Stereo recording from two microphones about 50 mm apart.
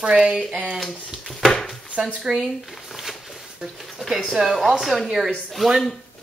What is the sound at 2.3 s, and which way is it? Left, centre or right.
Speech, centre.